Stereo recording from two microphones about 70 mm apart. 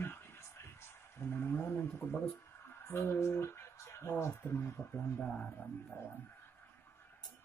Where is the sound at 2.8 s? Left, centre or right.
Left.